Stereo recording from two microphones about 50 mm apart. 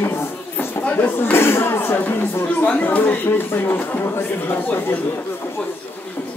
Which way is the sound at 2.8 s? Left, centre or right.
Left.